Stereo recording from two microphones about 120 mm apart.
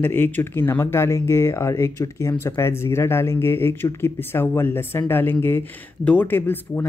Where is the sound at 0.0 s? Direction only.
15° left (ahead or behind).